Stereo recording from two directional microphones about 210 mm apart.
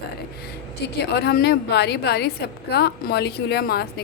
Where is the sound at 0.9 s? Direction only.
50° left (ahead or behind).